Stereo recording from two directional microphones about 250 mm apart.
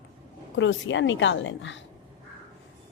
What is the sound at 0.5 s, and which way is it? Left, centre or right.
Speech, left.